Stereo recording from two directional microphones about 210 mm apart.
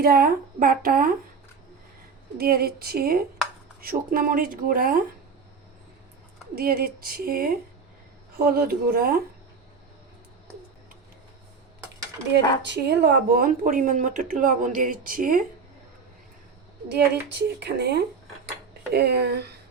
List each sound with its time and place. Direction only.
0.0 s speech: 45° right (ahead or behind)
2.4 s speech: 45° right (ahead or behind)
6.6 s speech: 45° right (ahead or behind)
12.6 s speech: 50° right (ahead or behind)
16.9 s speech: 50° right (ahead or behind)